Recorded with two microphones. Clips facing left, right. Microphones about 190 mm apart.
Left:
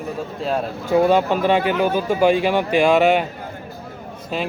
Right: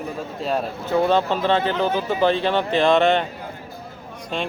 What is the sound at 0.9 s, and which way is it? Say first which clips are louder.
A man's voice: left 3 dB; 10° left (ahead or behind).